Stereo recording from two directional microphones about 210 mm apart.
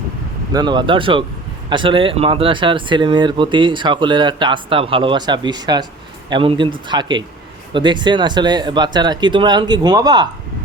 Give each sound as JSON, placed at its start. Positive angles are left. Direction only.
{"t": 0.5, "sound": "speech", "side_deg": -20}